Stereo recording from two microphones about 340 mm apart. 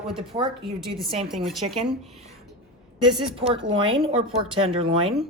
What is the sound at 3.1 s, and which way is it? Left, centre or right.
A woman's voice, centre.